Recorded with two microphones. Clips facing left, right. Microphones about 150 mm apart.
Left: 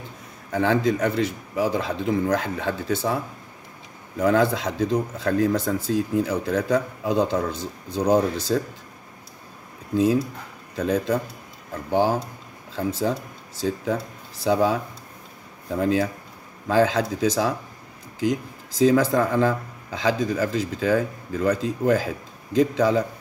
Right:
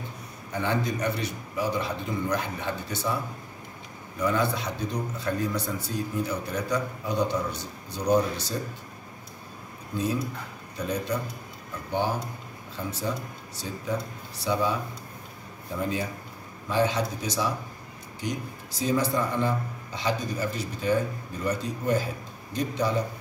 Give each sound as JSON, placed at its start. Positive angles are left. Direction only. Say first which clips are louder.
{"t": 0.5, "sound": "a man's voice", "louder": "left 7 dB", "side_deg": 90}
{"t": 4.2, "sound": "a man's voice", "louder": "left 6 dB", "side_deg": 90}
{"t": 10.8, "sound": "a man's voice", "louder": "left 7 dB", "side_deg": 90}